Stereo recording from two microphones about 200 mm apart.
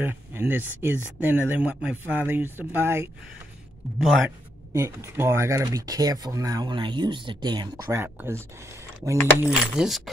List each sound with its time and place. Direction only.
0.0 s speech: 10° right (ahead or behind)
4.7 s speech: 15° right (ahead or behind)
9.5 s speech: centre (ahead or behind)